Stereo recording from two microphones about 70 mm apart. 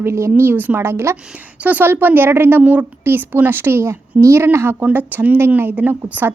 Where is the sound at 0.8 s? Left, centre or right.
Right.